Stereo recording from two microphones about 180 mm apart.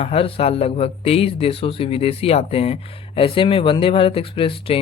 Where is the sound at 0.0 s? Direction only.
35° left (ahead or behind).